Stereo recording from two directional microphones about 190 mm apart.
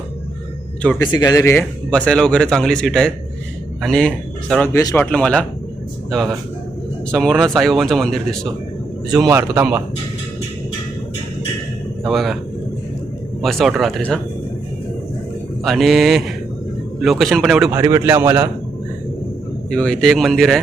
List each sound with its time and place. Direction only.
0.9 s speech: 20° left (ahead or behind)
4.7 s a man's voice: 15° left (ahead or behind)
5.1 s speech: 5° left (ahead or behind)
9.3 s a man's voice: 15° right (ahead or behind)
12.0 s speech: centre (ahead or behind)
13.4 s speech: centre (ahead or behind)
15.6 s speech: centre (ahead or behind)
17.7 s a man's voice: 15° right (ahead or behind)
19.7 s speech: 5° left (ahead or behind)